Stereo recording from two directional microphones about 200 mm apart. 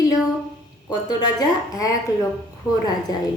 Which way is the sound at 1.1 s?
20° left (ahead or behind).